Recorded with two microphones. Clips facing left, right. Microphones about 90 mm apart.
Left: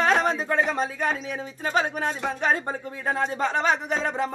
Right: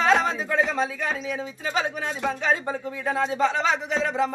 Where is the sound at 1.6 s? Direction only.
45° left (ahead or behind).